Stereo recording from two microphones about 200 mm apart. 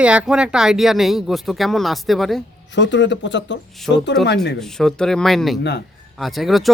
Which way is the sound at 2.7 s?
60° left (ahead or behind).